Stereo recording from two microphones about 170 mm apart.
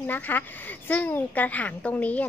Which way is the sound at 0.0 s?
10° left (ahead or behind).